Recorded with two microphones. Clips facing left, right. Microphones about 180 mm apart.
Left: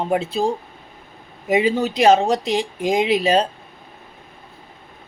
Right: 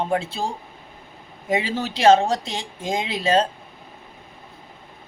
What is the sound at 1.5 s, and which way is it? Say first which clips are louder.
Speech: left 6 dB; 15° left (ahead or behind).